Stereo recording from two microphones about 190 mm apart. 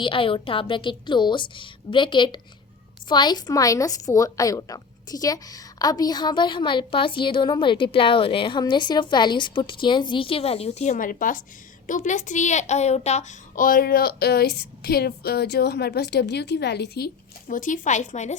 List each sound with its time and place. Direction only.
0.0 s a woman's voice: 25° left (ahead or behind); by 17.1 s 60° left (ahead or behind)
17.5 s a woman's voice: 45° left (ahead or behind)